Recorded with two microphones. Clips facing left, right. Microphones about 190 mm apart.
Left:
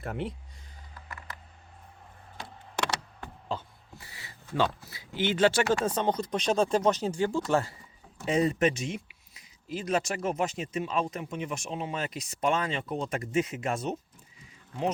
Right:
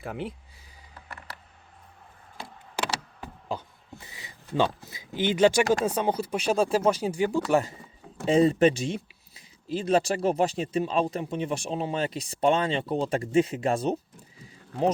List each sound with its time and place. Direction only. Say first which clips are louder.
0.0 s speech: even; centre (ahead or behind)
2.8 s power windows: right 1 dB; 5° right (ahead or behind)
4.0 s a sound: right 2 dB; 20° right (ahead or behind)
4.5 s speech: right 3 dB; 15° right (ahead or behind)
8.2 s speech: right 5 dB; 30° right (ahead or behind)
14.4 s a sound: right 5 dB; 35° right (ahead or behind)